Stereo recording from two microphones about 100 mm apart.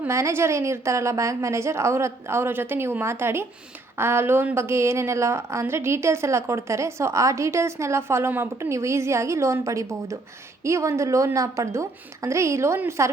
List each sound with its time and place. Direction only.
0.1 s a woman's voice: 25° right (ahead or behind)